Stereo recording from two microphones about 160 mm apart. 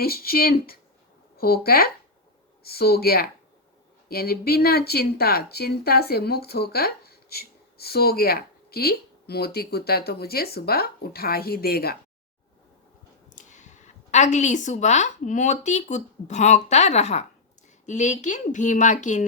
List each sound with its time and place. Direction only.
0.0 s speech: 70° left (ahead or behind)
13.3 s a woman's voice: 50° left (ahead or behind)